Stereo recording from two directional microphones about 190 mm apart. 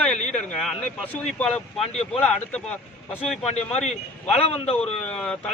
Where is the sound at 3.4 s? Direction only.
35° left (ahead or behind).